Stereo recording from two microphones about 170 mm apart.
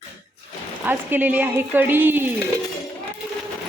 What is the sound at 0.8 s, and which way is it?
Speech, 10° right (ahead or behind).